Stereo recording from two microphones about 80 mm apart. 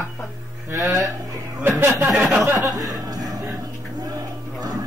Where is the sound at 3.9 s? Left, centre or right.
Right.